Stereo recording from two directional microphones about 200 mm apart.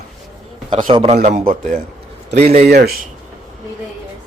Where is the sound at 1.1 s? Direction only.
40° right (ahead or behind).